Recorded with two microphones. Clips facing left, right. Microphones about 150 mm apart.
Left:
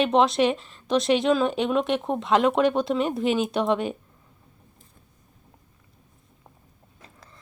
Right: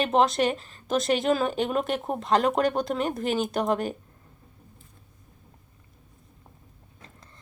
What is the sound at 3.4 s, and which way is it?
Speech, 45° right (ahead or behind).